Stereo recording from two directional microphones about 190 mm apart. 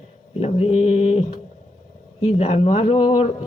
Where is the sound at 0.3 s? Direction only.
30° left (ahead or behind).